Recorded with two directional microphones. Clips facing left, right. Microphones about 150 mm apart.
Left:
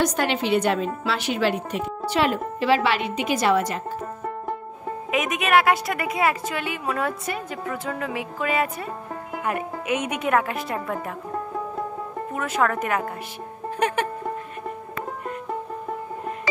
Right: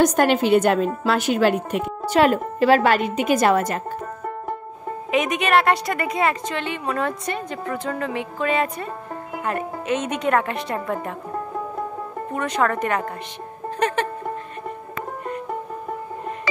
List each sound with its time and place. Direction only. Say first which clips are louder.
0.0 s a woman's voice: right 6 dB; 45° right (ahead or behind)
5.1 s a woman's voice: right 2 dB; centre (ahead or behind)
12.4 s a woman's voice: right 2 dB; 5° left (ahead or behind)
13.7 s music: right 1 dB; 10° left (ahead or behind)